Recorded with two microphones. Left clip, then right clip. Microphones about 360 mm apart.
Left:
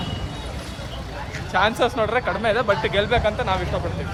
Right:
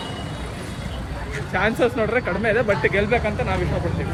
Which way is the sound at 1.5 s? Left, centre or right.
Centre.